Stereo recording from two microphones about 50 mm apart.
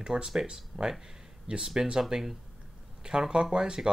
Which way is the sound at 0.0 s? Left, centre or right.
Centre.